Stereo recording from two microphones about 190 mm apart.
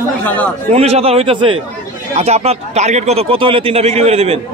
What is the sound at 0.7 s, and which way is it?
A man's voice, 35° right (ahead or behind).